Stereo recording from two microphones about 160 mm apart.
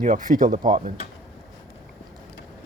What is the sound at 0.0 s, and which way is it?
Speech, 55° right (ahead or behind).